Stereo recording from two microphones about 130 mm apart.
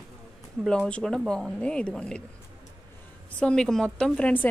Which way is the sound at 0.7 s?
5° left (ahead or behind).